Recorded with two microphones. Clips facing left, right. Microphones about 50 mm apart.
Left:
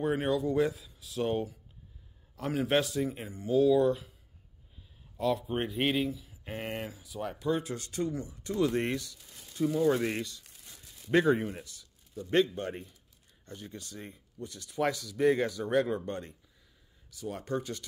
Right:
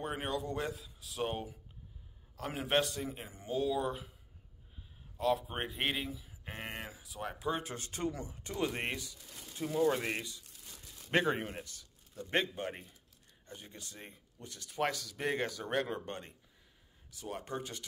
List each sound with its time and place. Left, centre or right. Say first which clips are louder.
0.0 s speech: left 8 dB; centre
2.6 s speech: left 4 dB; centre
5.1 s speech: left 3 dB; centre
7.5 s speech: left 6 dB; right
9.7 s speech: left 3 dB; centre
11.1 s a man's voice: left 6 dB; right
12.5 s speech: left 4 dB; centre
13.5 s speech: left 6 dB; right
14.1 s speech: left 7 dB; right